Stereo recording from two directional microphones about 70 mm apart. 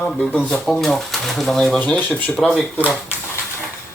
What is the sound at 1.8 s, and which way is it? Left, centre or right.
Speech, centre.